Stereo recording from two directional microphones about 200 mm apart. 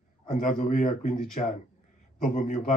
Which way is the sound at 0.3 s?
40° left (ahead or behind).